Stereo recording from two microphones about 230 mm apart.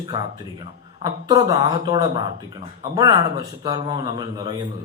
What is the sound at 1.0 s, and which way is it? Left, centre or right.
A man's voice, centre.